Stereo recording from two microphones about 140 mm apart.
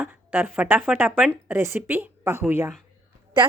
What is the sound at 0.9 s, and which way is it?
Speech, 15° right (ahead or behind).